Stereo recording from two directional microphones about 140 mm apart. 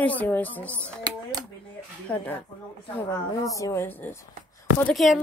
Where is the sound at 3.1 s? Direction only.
25° left (ahead or behind).